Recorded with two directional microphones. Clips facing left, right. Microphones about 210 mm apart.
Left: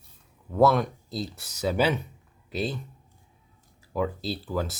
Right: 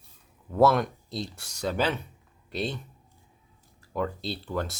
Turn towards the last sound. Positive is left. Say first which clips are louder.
# left 2 dB
turn(degrees=0)  # may be behind; listen again after turning